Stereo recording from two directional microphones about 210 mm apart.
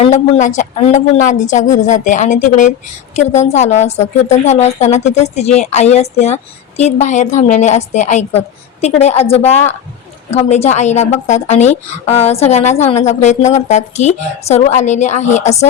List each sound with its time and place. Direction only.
0.0 s a woman's voice: 35° left (ahead or behind)